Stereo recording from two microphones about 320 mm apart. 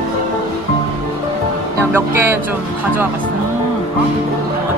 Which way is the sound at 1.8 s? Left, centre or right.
Centre.